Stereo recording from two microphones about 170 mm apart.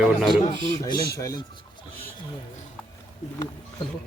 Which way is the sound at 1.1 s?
20° left (ahead or behind).